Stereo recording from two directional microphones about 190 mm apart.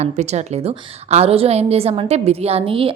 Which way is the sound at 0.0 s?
35° right (ahead or behind).